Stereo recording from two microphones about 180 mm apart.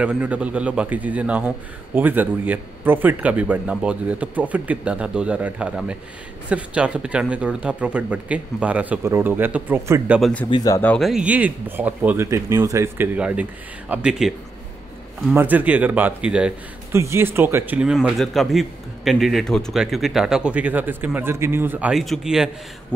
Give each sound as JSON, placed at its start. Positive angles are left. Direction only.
{"t": 0.0, "sound": "speech", "side_deg": -10}
{"t": 10.5, "sound": "speech", "side_deg": 20}
{"t": 10.8, "sound": "speech", "side_deg": 10}
{"t": 11.1, "sound": "speech", "side_deg": -5}
{"t": 15.3, "sound": "a man's voice", "side_deg": -10}